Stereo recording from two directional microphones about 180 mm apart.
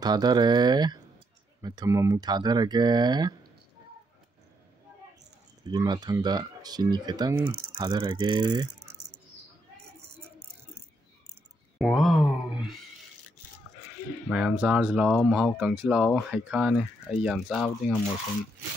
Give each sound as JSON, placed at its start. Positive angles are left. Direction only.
{"t": 0.0, "sound": "speech", "side_deg": -25}
{"t": 5.7, "sound": "speech", "side_deg": -20}
{"t": 11.8, "sound": "a sound", "side_deg": 0}
{"t": 14.3, "sound": "speech", "side_deg": -5}